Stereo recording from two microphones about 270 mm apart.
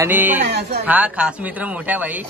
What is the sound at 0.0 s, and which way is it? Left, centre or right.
Speech, centre.